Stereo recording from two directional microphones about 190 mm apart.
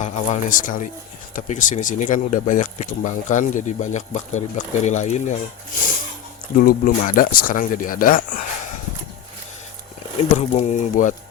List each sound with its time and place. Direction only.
0.0 s speech: 40° left (ahead or behind)
6.6 s speech: 50° left (ahead or behind)
10.3 s speech: 35° left (ahead or behind)